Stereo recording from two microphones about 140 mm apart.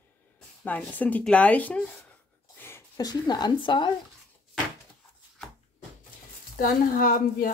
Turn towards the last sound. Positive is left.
turn(degrees=90)